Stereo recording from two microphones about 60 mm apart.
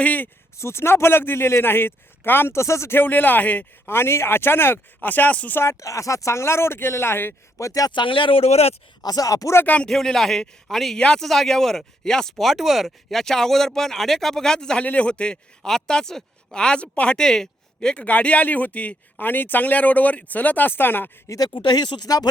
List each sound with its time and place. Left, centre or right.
0.0 s speech: left
0.5 s speech: left
3.0 s speech: left
3.8 s speech: left
4.9 s speech: left
5.5 s speech: left
7.6 s speech: left
9.0 s speech: left
9.6 s speech: left
9.9 s speech: centre
11.0 s speech: centre
12.4 s speech: centre; by 17.2 s left
17.2 s speech: centre; by 21.1 s left
21.2 s speech: left